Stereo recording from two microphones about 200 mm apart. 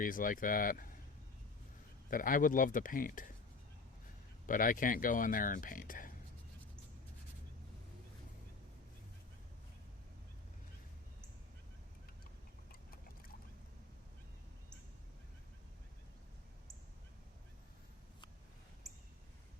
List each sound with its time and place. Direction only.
0.0 s speech: 45° left (ahead or behind)
2.0 s speech: 45° left (ahead or behind)
4.4 s speech: 40° left (ahead or behind)